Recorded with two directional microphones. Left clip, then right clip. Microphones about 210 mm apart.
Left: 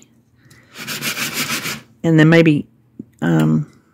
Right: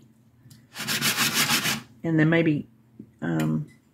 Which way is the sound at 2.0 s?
55° left (ahead or behind).